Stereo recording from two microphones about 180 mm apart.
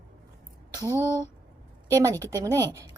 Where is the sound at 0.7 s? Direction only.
20° right (ahead or behind).